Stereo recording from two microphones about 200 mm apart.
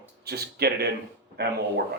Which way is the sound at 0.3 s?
50° right (ahead or behind).